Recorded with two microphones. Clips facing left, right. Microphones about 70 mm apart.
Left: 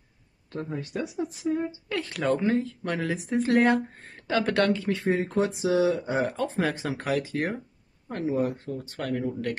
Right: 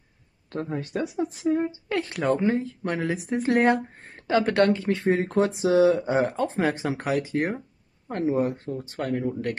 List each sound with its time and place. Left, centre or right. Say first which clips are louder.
0.5 s speech: right 3 dB; right
2.0 s speech: right 1 dB; right
8.1 s speech: right 3 dB; right